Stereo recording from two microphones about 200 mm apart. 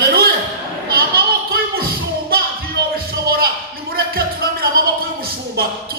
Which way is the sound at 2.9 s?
50° right (ahead or behind).